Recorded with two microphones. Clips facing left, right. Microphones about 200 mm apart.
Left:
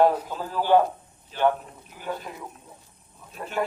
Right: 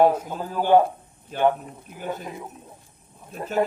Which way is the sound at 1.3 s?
50° right (ahead or behind).